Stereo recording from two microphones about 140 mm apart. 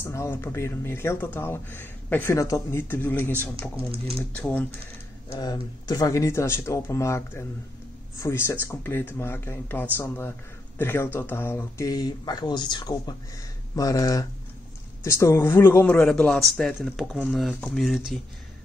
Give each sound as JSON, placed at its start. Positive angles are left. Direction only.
{"t": 0.0, "sound": "speech", "side_deg": 20}
{"t": 5.3, "sound": "speech", "side_deg": 30}